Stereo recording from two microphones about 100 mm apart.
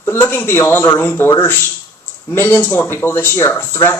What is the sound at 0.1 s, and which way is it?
Speech, 20° left (ahead or behind).